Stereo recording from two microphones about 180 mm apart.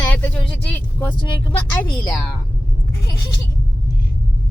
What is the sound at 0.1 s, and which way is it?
Vehicle, 5° left (ahead or behind).